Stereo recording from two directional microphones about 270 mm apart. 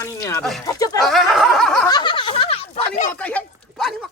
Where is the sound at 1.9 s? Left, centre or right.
Centre.